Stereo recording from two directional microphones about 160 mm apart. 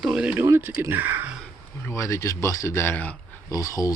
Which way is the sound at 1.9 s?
20° left (ahead or behind).